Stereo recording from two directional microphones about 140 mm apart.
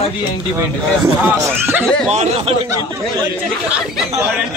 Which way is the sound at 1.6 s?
15° right (ahead or behind).